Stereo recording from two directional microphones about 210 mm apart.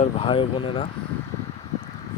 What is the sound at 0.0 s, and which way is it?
Speech, 25° left (ahead or behind).